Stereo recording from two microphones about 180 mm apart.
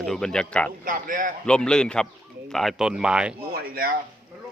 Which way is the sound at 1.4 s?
5° left (ahead or behind).